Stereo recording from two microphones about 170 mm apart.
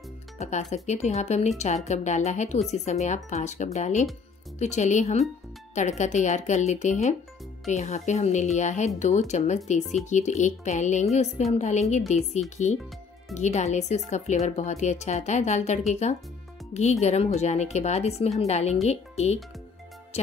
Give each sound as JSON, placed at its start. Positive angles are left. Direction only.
{"t": 0.4, "sound": "a woman's voice", "side_deg": 40}
{"t": 13.3, "sound": "a woman's voice", "side_deg": 45}